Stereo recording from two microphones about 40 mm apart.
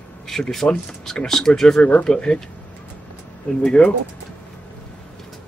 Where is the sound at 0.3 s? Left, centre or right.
Centre.